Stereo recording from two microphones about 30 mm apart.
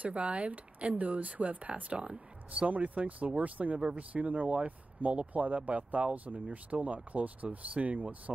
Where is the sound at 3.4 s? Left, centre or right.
Right.